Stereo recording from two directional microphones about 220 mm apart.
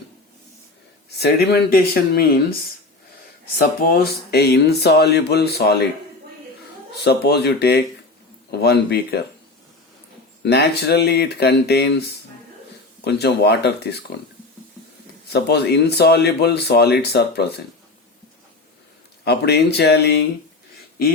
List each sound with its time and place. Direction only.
1.2 s speech: 45° left (ahead or behind)
3.6 s speech: 45° left (ahead or behind)
7.0 s speech: 50° left (ahead or behind)
10.4 s speech: 50° left (ahead or behind)
13.1 s speech: 50° left (ahead or behind)
15.3 s speech: 50° left (ahead or behind)
19.2 s speech: 50° left (ahead or behind)